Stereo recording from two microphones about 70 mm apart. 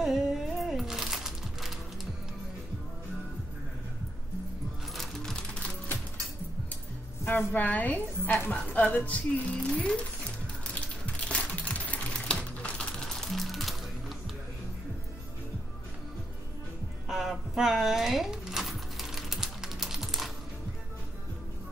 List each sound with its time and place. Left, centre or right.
0.0 s music: centre
4.9 s typewriter: centre
7.2 s speech: left
10.7 s typing: centre
13.3 s music: centre
17.1 s a sound: centre